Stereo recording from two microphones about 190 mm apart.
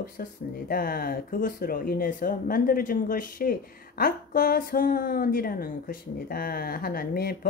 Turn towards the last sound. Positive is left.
turn(degrees=50)  # may be behind; listen again after turning